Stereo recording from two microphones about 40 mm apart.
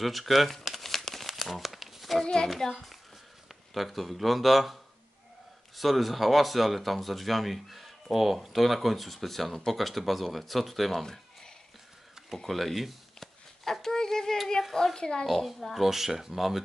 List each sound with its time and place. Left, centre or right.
0.0 s speech: centre
0.7 s crumpling: centre
2.4 s a child's voice: centre
5.8 s speech: centre
12.4 s a sound: centre
15.0 s speech: centre
15.2 s speech: centre